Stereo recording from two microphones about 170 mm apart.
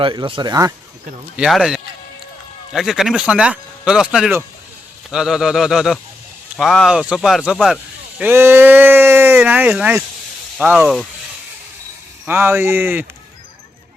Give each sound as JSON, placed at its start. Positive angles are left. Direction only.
{"t": 0.0, "sound": "speech", "side_deg": -30}
{"t": 1.4, "sound": "speech", "side_deg": 0}
{"t": 12.2, "sound": "speech", "side_deg": -10}